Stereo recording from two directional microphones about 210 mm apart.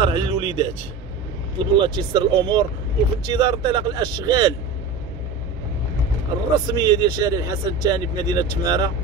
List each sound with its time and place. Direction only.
0.0 s a man's voice: 25° right (ahead or behind)
6.7 s speech: 20° right (ahead or behind)